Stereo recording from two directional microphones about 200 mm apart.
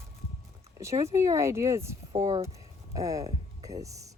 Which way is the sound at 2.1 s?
35° right (ahead or behind).